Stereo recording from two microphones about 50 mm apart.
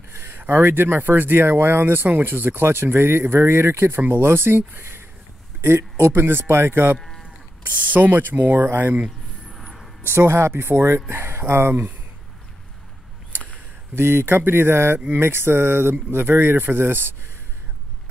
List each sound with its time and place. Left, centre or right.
0.1 s speech: right
7.0 s sheep: centre
7.9 s speech: right
10.0 s speech: right
13.9 s speech: right